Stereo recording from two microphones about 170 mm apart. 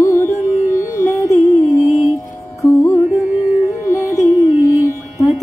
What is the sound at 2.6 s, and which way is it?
Music, 15° left (ahead or behind).